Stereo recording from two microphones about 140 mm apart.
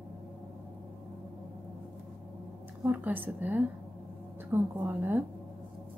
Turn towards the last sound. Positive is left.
turn(degrees=-15)  # may be behind; listen again after turning